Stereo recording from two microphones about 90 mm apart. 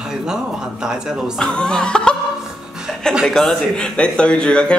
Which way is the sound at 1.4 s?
10° left (ahead or behind).